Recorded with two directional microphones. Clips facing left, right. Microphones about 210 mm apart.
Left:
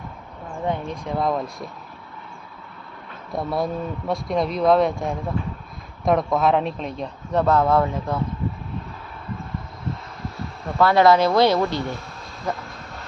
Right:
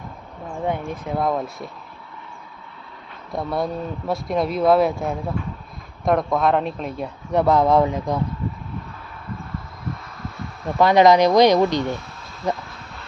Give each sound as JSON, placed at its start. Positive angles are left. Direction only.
{"t": 0.7, "sound": "speech", "side_deg": -5}
{"t": 3.3, "sound": "speech", "side_deg": 0}
{"t": 10.8, "sound": "speech", "side_deg": -15}